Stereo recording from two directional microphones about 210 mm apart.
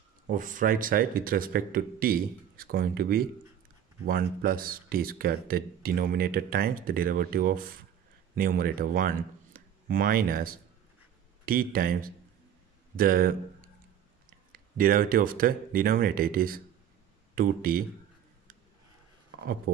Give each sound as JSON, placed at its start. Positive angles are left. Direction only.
{"t": 0.3, "sound": "speech", "side_deg": -40}
{"t": 14.5, "sound": "speech", "side_deg": -40}